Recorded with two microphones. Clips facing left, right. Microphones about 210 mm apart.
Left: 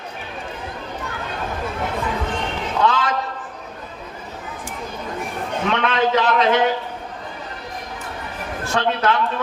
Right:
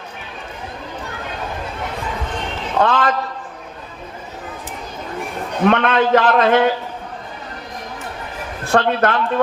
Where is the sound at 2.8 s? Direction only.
55° right (ahead or behind).